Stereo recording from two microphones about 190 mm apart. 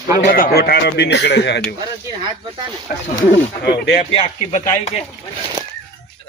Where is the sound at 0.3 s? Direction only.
50° left (ahead or behind).